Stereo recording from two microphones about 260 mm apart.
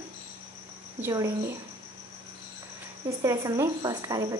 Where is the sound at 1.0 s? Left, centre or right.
Centre.